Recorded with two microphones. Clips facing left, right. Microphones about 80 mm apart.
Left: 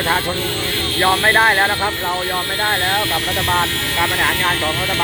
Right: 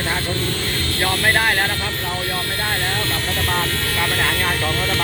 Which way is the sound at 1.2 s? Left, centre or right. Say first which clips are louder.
Left 3 dB; left.